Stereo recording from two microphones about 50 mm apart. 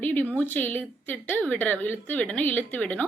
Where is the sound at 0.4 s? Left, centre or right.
Left.